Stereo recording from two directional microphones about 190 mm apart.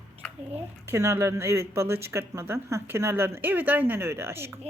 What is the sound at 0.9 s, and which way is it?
Speech, 15° right (ahead or behind).